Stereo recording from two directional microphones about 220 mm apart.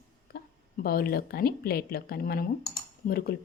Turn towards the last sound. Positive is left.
turn(degrees=45)  # may be behind; listen again after turning